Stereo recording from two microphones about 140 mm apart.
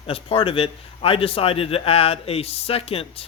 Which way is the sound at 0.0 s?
40° left (ahead or behind).